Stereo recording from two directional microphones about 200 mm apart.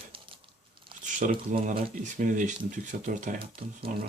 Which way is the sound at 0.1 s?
25° right (ahead or behind).